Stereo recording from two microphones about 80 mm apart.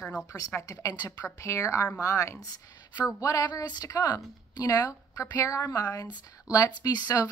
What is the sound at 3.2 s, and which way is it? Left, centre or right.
A woman's voice, left.